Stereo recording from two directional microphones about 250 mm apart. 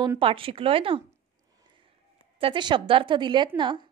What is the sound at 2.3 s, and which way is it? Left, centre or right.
A woman's voice, centre.